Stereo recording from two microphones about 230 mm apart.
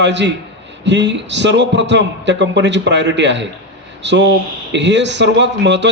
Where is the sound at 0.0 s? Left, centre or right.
Right.